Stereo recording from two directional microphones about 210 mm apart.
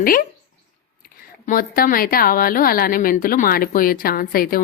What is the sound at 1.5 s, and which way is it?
Speech, 45° left (ahead or behind).